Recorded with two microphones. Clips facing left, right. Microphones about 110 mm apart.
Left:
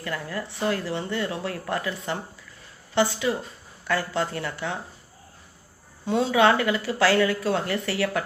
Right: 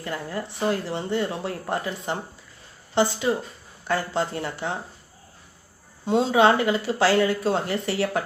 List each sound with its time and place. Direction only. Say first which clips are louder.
0.0 s speech: right 1 dB; 25° right (ahead or behind)
6.1 s speech: right 2 dB; 25° right (ahead or behind)